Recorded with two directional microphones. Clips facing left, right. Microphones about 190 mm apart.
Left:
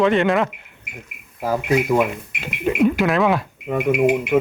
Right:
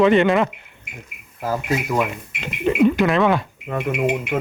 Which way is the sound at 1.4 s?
15° left (ahead or behind).